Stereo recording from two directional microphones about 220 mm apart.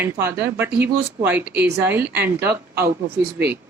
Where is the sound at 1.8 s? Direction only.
10° right (ahead or behind).